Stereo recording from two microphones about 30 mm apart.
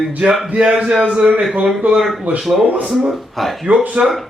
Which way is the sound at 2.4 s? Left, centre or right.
Centre.